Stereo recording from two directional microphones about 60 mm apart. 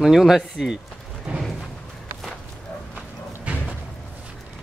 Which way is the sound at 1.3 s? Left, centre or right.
Centre.